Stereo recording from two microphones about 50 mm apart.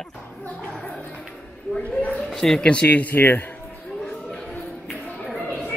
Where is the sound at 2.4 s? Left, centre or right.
Centre; by 3.2 s left.